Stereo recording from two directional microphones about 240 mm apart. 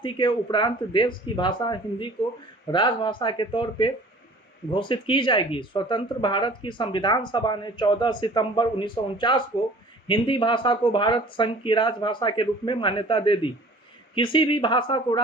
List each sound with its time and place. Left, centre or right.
0.0 s speech: centre